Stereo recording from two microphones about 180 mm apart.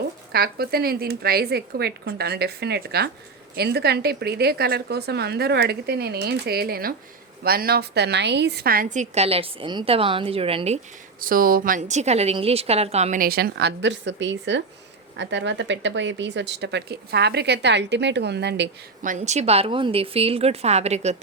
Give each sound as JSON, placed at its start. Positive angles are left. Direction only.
{"t": 0.3, "sound": "a woman's voice", "side_deg": -60}
{"t": 11.2, "sound": "a woman's voice", "side_deg": -50}
{"t": 19.0, "sound": "a woman's voice", "side_deg": -40}